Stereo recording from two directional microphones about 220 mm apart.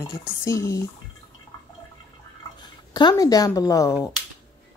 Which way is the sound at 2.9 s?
20° left (ahead or behind).